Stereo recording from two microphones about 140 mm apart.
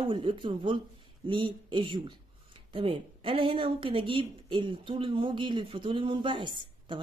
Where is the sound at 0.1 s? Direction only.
40° right (ahead or behind).